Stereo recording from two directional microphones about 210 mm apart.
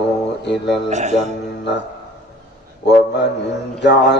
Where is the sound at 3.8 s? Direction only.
55° left (ahead or behind).